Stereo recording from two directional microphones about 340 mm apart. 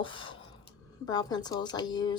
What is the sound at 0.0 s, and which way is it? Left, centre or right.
Speech, centre.